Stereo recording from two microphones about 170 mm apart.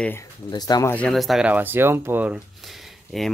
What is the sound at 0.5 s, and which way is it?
Speech, 25° left (ahead or behind).